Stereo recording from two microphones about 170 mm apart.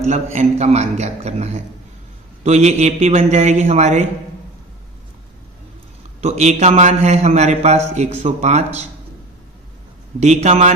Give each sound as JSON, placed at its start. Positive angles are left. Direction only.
{"t": 0.0, "sound": "a man's voice", "side_deg": -40}
{"t": 6.2, "sound": "a man's voice", "side_deg": -40}
{"t": 10.2, "sound": "a man's voice", "side_deg": -40}